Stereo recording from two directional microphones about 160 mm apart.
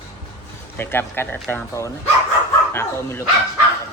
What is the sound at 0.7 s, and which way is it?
Speech, 15° left (ahead or behind).